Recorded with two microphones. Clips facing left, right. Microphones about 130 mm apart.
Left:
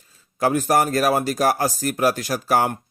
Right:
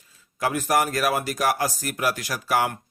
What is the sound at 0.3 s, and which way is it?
Speech, 35° left (ahead or behind).